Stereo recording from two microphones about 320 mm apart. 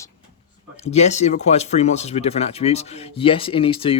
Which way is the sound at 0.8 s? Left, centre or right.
Left.